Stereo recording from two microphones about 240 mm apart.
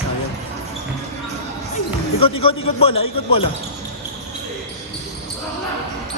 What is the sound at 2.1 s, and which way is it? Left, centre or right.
Speech, left.